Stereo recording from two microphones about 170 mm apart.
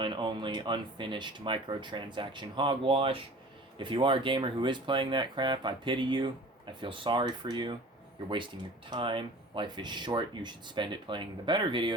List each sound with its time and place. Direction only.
0.0 s speech: 30° right (ahead or behind)
8.9 s speech: 30° right (ahead or behind)